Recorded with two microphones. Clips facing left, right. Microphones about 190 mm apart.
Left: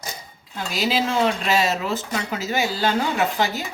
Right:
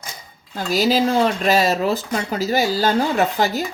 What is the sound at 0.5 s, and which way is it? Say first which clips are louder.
Speech: right 5 dB; 40° right (ahead or behind).